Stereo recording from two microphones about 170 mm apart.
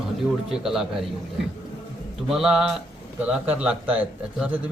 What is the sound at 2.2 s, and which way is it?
A man's voice, 5° right (ahead or behind).